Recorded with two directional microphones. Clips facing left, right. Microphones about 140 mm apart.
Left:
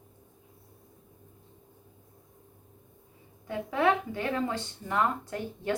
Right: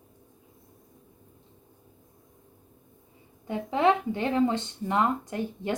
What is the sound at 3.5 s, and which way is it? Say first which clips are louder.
Speech: right 3 dB; 25° right (ahead or behind).